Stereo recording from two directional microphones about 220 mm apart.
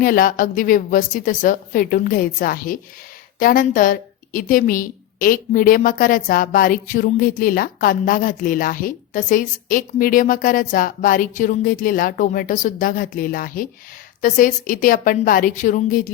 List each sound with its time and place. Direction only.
0.0 s a woman's voice: 40° left (ahead or behind)